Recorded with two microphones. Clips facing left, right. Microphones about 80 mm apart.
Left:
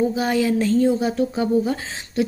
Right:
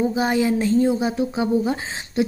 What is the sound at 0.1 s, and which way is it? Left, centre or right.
A woman's voice, centre.